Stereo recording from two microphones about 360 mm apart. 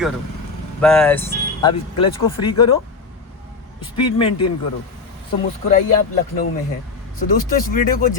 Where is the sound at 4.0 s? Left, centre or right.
Centre.